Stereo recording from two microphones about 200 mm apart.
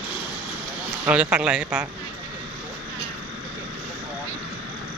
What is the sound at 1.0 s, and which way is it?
Speech, 5° right (ahead or behind).